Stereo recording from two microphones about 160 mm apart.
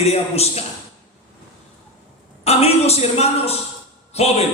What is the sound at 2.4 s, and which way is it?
Speech, 40° left (ahead or behind).